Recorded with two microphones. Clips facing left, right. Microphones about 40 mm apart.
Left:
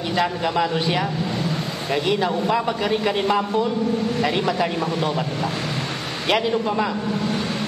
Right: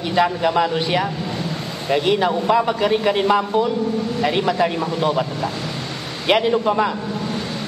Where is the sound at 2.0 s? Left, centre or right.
Centre.